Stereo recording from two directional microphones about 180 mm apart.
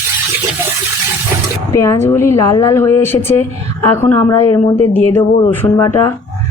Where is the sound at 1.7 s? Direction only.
15° left (ahead or behind).